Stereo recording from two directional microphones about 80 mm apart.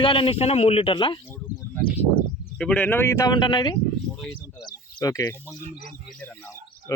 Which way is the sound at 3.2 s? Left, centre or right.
Left.